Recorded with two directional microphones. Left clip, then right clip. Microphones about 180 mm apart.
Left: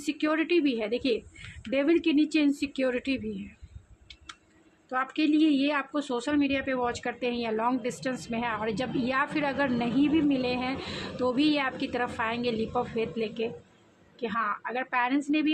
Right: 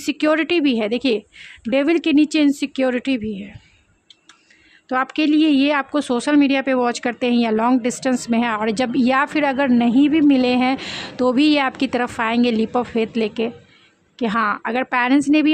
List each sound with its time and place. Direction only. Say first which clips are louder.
0.0 s a woman's voice: right 10 dB; 50° right (ahead or behind)
4.9 s a woman's voice: right 9 dB; 45° right (ahead or behind)